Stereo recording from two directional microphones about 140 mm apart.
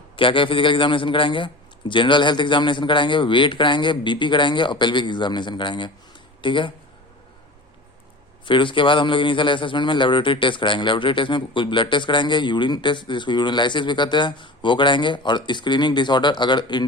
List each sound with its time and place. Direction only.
0.2 s a man's voice: 40° left (ahead or behind)
8.4 s a man's voice: 35° left (ahead or behind)